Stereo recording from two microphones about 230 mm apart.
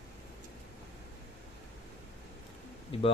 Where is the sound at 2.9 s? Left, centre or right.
Left.